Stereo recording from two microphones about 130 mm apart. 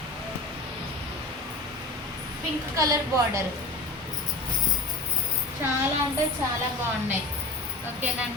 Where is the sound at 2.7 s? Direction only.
25° right (ahead or behind).